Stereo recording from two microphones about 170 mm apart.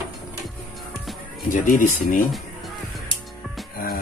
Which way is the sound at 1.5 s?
50° left (ahead or behind).